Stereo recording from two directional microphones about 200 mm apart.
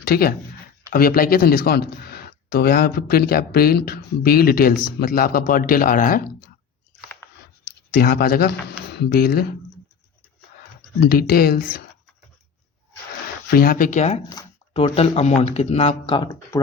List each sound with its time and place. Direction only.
0.0 s speech: 50° left (ahead or behind)
7.9 s speech: 45° left (ahead or behind)
11.0 s speech: 50° left (ahead or behind)
13.5 s speech: 45° left (ahead or behind)
14.4 s a sound: 20° left (ahead or behind)
14.7 s speech: 30° left (ahead or behind)